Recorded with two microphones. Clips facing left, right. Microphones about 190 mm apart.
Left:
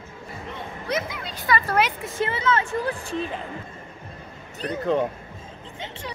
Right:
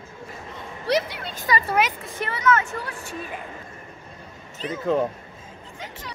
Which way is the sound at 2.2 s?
25° left (ahead or behind).